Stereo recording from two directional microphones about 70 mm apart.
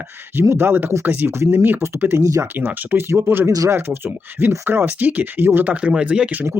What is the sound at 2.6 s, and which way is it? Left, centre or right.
Speech, right.